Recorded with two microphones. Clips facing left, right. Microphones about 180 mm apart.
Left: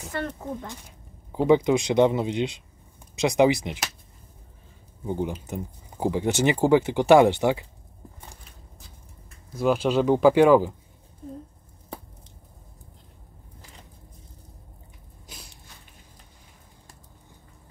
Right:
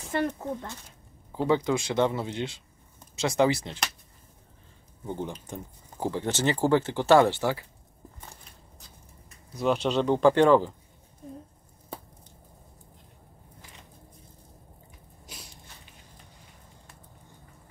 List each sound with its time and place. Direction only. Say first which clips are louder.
0.1 s speech: right 3 dB; 20° right (ahead or behind)
1.3 s speech: left 6 dB; 15° left (ahead or behind)
5.0 s speech: left 5 dB; 10° left (ahead or behind)
9.6 s speech: left 3 dB; 5° left (ahead or behind)
15.2 s a sound: even; centre (ahead or behind)